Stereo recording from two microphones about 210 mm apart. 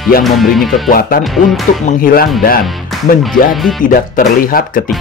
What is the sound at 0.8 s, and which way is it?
Speech, 45° left (ahead or behind).